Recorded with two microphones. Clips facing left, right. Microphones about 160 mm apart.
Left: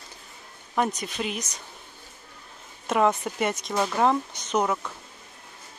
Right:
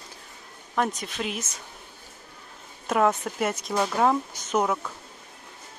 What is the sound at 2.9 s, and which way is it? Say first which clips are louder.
Speech: even; centre (ahead or behind).